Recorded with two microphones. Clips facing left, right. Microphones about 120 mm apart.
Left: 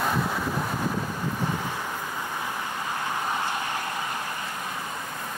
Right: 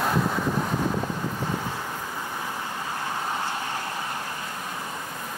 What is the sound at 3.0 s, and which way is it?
Vehicle, 15° left (ahead or behind).